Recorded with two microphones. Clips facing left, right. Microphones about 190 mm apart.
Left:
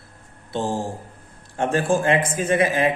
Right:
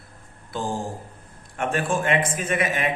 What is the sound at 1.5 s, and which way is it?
Speech, 30° left (ahead or behind).